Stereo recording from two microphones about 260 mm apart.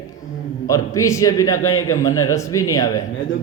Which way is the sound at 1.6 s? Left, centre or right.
Left.